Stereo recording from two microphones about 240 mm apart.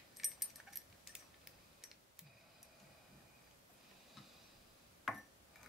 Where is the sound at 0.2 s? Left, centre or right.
Centre.